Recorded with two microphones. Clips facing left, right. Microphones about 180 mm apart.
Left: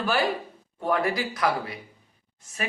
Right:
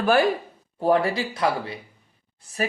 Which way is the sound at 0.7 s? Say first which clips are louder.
Right 5 dB; 30° right (ahead or behind).